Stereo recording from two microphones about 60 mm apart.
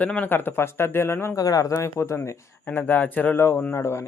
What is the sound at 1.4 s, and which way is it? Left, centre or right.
Speech, left.